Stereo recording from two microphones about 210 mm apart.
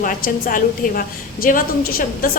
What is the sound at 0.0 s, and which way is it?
A woman's voice, 40° left (ahead or behind).